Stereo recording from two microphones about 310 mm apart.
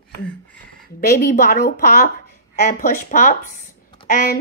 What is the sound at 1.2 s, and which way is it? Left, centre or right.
Speech, left.